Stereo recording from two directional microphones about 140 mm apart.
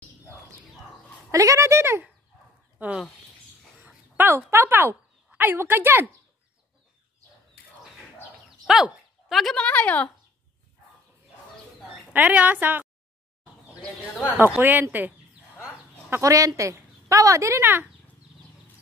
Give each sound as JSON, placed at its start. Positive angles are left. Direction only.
{"t": 1.3, "sound": "a woman's voice", "side_deg": -20}
{"t": 2.8, "sound": "speech", "side_deg": -5}
{"t": 3.8, "sound": "a sound", "side_deg": -15}
{"t": 8.6, "sound": "speech", "side_deg": -5}
{"t": 12.1, "sound": "speech", "side_deg": -10}
{"t": 13.7, "sound": "speech", "side_deg": 10}
{"t": 14.4, "sound": "a woman's voice", "side_deg": -15}